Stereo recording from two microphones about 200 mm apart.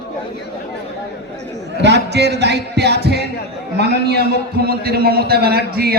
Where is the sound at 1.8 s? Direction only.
60° right (ahead or behind).